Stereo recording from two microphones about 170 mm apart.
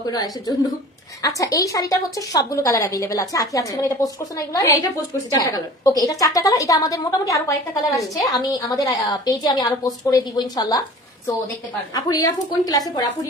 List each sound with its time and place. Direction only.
0.1 s a woman's voice: 20° left (ahead or behind)
11.9 s a woman's voice: 20° left (ahead or behind)